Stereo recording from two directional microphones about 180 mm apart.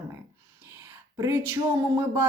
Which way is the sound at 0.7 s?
15° right (ahead or behind).